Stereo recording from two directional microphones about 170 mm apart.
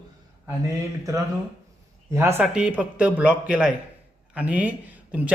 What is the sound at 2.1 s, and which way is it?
A man's voice, 15° right (ahead or behind).